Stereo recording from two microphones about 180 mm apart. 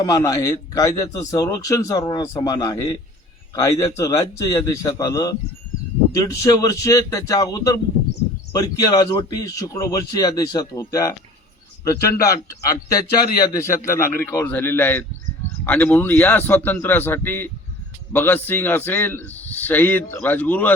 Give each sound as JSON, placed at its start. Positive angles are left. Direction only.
{"t": 0.0, "sound": "a man's voice", "side_deg": 20}